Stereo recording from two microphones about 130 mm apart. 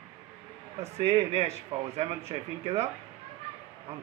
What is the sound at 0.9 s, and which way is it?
A man's voice, 50° right (ahead or behind).